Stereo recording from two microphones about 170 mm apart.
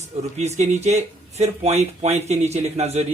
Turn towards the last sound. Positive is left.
turn(degrees=-40)  # may be behind; listen again after turning